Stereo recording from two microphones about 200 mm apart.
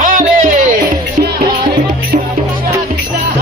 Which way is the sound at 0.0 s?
40° right (ahead or behind).